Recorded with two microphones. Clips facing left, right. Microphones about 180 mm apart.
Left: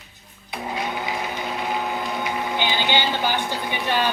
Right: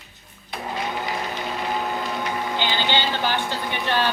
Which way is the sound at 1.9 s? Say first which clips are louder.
Even; 10° left (ahead or behind).